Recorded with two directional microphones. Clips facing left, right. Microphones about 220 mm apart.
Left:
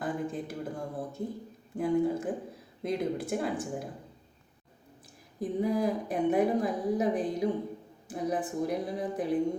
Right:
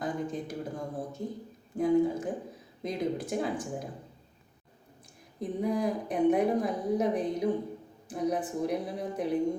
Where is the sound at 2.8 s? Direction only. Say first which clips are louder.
Left 1 dB; 55° left (ahead or behind).